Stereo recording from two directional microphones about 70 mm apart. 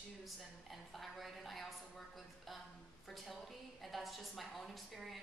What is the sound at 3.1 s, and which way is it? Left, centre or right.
A woman's voice, centre.